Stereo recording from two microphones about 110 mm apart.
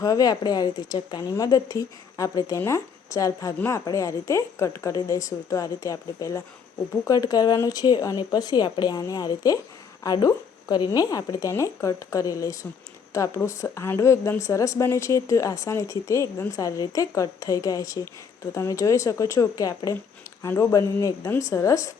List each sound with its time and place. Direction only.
0.0 s a woman's voice: 35° left (ahead or behind)